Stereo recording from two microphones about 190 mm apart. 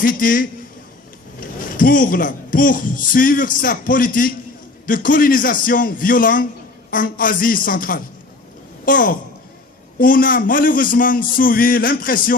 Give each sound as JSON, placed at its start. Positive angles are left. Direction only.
{"t": 0.0, "sound": "a woman's voice", "side_deg": 45}